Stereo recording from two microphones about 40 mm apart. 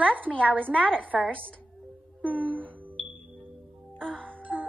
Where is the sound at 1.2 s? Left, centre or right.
Left.